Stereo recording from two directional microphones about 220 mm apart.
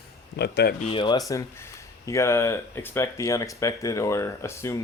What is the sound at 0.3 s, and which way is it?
Speech, 50° left (ahead or behind).